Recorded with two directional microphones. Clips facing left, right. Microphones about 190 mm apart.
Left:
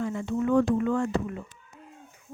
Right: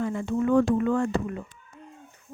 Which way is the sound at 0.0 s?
55° right (ahead or behind).